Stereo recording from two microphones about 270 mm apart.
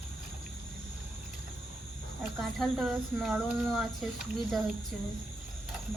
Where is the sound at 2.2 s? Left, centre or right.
Centre.